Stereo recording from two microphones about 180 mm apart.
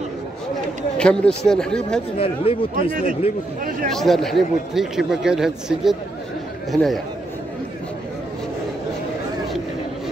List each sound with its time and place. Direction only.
0.9 s a man's voice: 5° left (ahead or behind)
2.1 s speech: 30° left (ahead or behind)
2.7 s speech: 45° right (ahead or behind)
3.9 s a man's voice: centre (ahead or behind)